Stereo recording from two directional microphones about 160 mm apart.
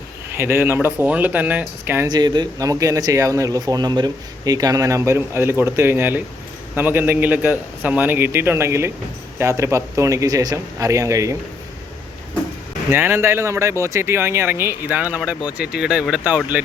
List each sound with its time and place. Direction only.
0.3 s speech: 15° right (ahead or behind)
2.0 s speech: 25° right (ahead or behind)
12.9 s speech: 15° right (ahead or behind)